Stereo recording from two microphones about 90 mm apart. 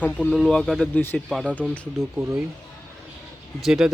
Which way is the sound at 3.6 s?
5° right (ahead or behind).